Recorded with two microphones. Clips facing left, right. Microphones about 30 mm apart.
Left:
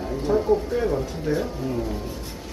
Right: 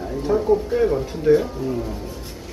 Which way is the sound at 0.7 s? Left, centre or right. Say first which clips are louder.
Right 4 dB; centre.